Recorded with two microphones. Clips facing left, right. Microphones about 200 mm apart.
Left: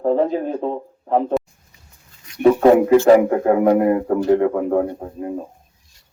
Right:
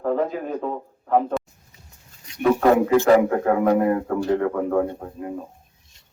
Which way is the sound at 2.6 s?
15° left (ahead or behind).